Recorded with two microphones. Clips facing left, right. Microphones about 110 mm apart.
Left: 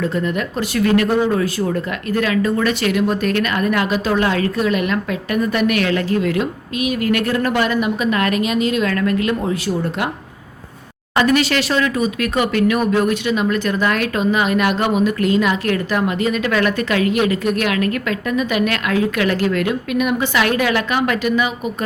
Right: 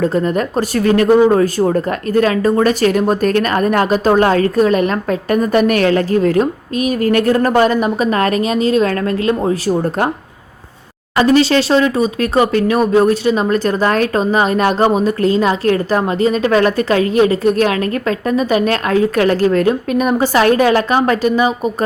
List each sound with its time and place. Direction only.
0.0 s speech: 40° right (ahead or behind)
11.2 s speech: 30° right (ahead or behind)